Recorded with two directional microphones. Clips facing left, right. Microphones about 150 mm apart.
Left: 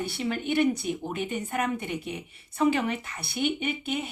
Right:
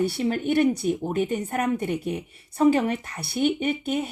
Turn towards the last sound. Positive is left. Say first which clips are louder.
# right 5 dB
turn(degrees=-45)  # may be behind; listen again after turning